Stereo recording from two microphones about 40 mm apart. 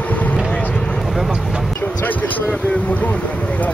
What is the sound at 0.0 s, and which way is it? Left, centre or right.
Vehicle, left.